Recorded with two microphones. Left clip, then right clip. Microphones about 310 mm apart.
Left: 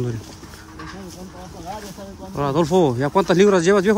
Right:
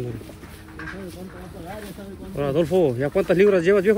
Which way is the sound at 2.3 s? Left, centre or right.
Centre.